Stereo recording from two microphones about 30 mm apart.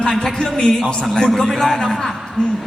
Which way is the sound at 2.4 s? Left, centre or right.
Left.